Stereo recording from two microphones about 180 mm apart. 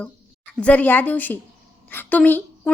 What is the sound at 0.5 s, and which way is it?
A woman's voice, 10° left (ahead or behind).